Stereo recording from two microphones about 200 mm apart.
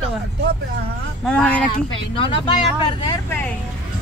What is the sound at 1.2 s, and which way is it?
Speech, 5° left (ahead or behind).